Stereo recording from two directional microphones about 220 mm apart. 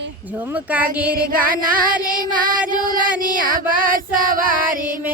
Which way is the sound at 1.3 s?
40° right (ahead or behind).